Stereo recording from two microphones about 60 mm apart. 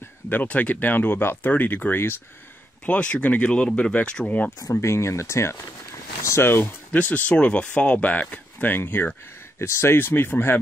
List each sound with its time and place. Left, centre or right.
0.3 s speech: left
1.5 s speech: left
2.8 s speech: left
4.7 s speech: left
6.9 s speech: left
9.6 s speech: left